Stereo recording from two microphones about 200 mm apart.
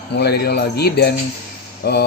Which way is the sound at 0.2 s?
55° left (ahead or behind).